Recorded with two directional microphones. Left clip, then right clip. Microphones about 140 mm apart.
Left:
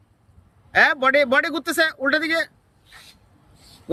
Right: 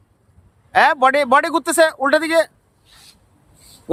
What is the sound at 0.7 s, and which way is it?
Speech, 20° right (ahead or behind).